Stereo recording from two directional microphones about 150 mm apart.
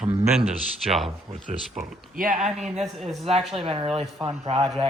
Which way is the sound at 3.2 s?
40° right (ahead or behind).